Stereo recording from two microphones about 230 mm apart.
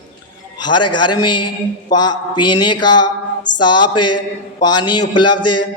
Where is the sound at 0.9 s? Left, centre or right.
Centre.